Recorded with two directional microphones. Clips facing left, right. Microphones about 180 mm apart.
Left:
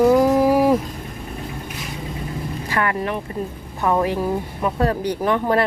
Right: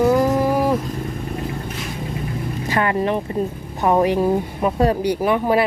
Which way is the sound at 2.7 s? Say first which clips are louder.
Right 3 dB; 25° right (ahead or behind).